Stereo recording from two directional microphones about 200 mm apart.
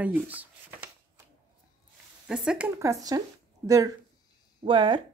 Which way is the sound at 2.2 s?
5° right (ahead or behind).